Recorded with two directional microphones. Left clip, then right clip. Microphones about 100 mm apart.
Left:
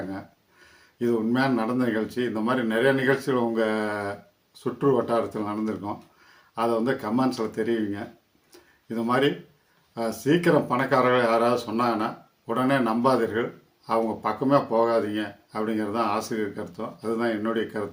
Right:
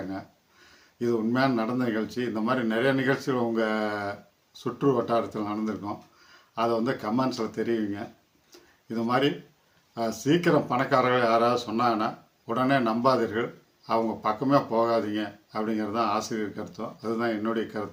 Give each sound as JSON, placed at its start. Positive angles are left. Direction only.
{"t": 0.9, "sound": "speech", "side_deg": -20}